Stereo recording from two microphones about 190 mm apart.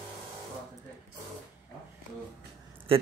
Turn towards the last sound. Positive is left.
turn(degrees=-30)  # may be behind; listen again after turning